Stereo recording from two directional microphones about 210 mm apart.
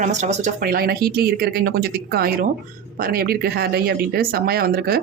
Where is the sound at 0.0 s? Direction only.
35° right (ahead or behind).